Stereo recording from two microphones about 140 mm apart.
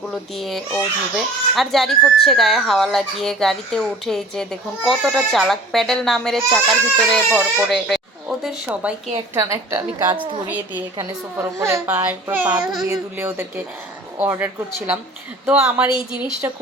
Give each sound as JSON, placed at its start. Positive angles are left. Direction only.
{"t": 0.3, "sound": "a child's voice", "side_deg": 0}
{"t": 8.4, "sound": "a child's voice", "side_deg": -10}
{"t": 9.3, "sound": "a woman's voice", "side_deg": -20}